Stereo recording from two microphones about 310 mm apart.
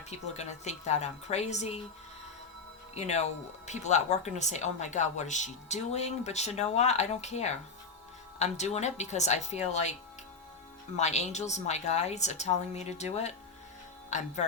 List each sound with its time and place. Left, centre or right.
0.1 s speech: left
2.9 s speech: left
10.9 s speech: left